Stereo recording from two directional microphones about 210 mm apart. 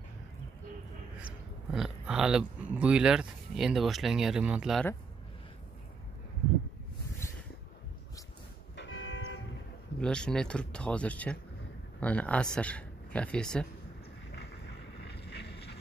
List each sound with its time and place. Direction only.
1.7 s speech: 5° right (ahead or behind)
8.7 s church bell: 65° left (ahead or behind)
9.9 s speech: 5° left (ahead or behind)
15.0 s boat: 55° left (ahead or behind)